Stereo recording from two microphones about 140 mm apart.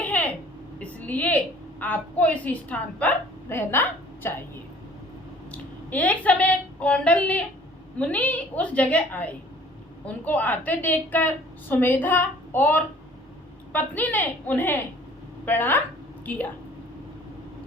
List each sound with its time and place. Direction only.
0.0 s a sound: 10° left (ahead or behind)
1.8 s a woman's voice: 10° left (ahead or behind)
5.5 s a woman's voice: 10° left (ahead or behind)